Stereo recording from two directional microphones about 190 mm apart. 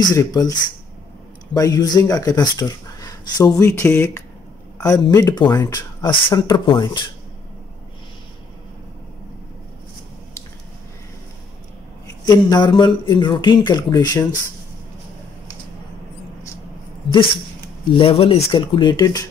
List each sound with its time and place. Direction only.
0.0 s speech: 20° left (ahead or behind)
1.5 s speech: 20° left (ahead or behind)
12.3 s speech: 20° left (ahead or behind)
17.9 s speech: 30° left (ahead or behind)